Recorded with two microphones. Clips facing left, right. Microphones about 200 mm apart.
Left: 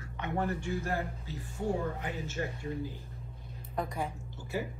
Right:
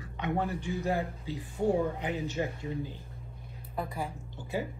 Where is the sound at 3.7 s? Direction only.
Centre (ahead or behind).